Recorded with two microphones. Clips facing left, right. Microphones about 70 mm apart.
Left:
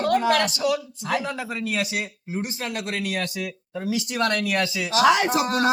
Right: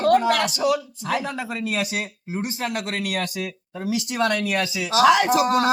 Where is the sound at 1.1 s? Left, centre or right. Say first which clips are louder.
Even; centre.